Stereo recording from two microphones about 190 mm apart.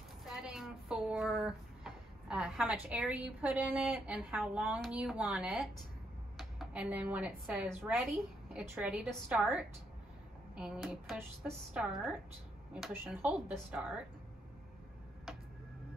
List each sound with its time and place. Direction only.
0.2 s a woman's voice: centre (ahead or behind)